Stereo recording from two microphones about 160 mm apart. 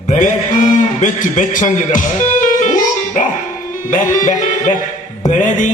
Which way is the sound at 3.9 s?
55° left (ahead or behind).